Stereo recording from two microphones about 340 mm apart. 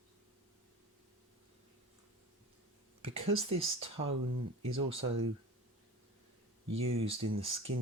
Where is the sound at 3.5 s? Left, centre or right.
Centre.